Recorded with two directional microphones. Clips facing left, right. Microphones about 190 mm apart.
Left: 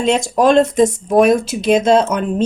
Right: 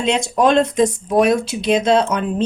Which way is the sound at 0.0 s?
45° left (ahead or behind).